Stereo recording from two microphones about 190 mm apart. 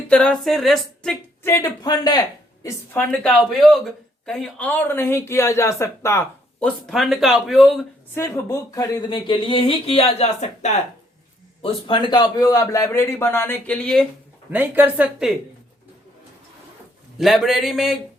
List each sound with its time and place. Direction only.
0.1 s speech: 5° left (ahead or behind)
1.4 s speech: 10° left (ahead or behind)
2.6 s speech: 10° left (ahead or behind)
8.1 s speech: 15° left (ahead or behind); by 10.7 s 35° left (ahead or behind)
11.6 s speech: 25° left (ahead or behind); by 14.1 s 5° left (ahead or behind)
14.5 s speech: 10° right (ahead or behind)
17.2 s speech: centre (ahead or behind)